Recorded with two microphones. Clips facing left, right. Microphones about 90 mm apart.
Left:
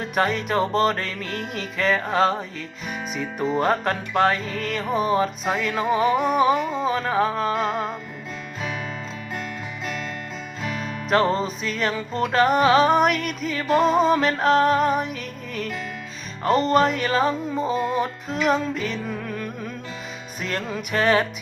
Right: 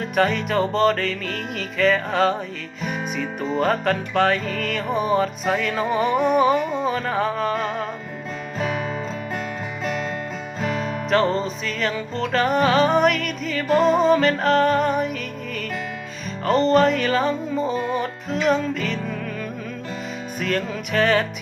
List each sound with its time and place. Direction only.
0.2 s music: 5° left (ahead or behind)
10.6 s music: 40° right (ahead or behind)
12.1 s music: 5° left (ahead or behind)
20.4 s music: 10° left (ahead or behind)